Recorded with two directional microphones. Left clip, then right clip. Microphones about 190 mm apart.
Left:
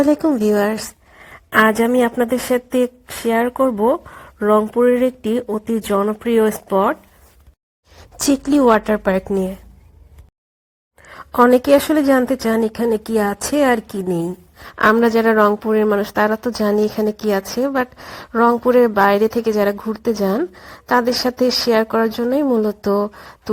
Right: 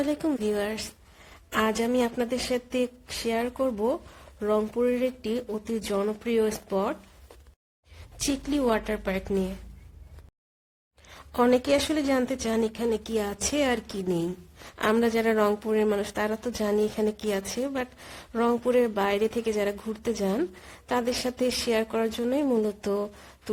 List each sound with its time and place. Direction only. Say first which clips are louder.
0.0 s a woman's voice: left 13 dB; 30° left (ahead or behind)
0.3 s a sound: left 11 dB; 30° left (ahead or behind)
1.8 s a woman's voice: left 10 dB; 15° left (ahead or behind)
8.2 s a woman's voice: left 12 dB; 25° left (ahead or behind)
11.1 s a sound: left 11 dB; 20° left (ahead or behind)
11.5 s a woman's voice: left 11 dB; 20° left (ahead or behind)